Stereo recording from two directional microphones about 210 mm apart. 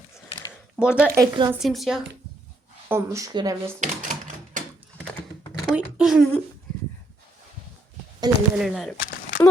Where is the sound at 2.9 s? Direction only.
15° right (ahead or behind).